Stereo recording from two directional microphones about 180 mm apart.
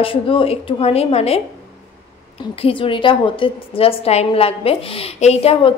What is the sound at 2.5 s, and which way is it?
A woman's voice, 30° left (ahead or behind).